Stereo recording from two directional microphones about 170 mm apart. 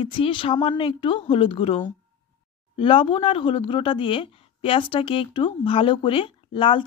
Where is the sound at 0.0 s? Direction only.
30° left (ahead or behind).